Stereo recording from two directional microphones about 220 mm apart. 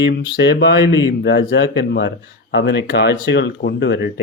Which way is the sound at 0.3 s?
50° left (ahead or behind).